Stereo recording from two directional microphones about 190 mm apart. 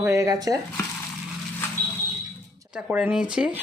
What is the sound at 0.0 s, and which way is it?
Speech, 15° right (ahead or behind).